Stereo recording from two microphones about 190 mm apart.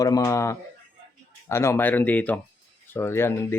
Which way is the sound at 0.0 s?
15° left (ahead or behind).